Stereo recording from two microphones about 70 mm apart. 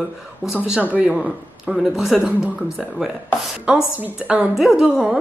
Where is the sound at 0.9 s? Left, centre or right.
Right.